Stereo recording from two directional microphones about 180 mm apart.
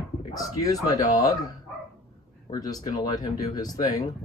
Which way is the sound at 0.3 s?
20° left (ahead or behind).